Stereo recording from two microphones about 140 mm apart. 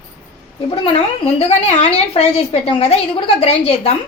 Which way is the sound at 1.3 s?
45° left (ahead or behind).